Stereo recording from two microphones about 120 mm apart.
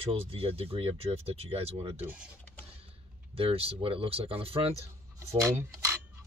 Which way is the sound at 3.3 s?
50° right (ahead or behind).